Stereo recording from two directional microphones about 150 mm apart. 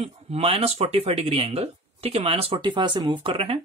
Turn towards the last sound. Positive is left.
turn(degrees=-40)  # may be behind; listen again after turning